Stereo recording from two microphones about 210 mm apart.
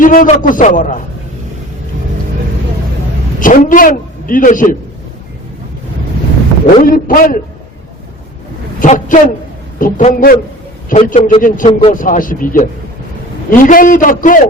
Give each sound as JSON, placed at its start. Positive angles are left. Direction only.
{"t": 0.0, "sound": "a man's voice", "side_deg": 40}
{"t": 3.4, "sound": "a man's voice", "side_deg": 40}
{"t": 6.8, "sound": "a man's voice", "side_deg": 40}
{"t": 8.8, "sound": "a man's voice", "side_deg": 40}
{"t": 11.7, "sound": "speech", "side_deg": 25}
{"t": 11.9, "sound": "a man's voice", "side_deg": 40}